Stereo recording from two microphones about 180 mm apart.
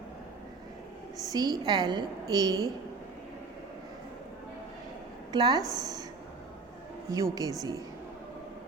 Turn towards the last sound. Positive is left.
turn(degrees=-20)  # may be behind; listen again after turning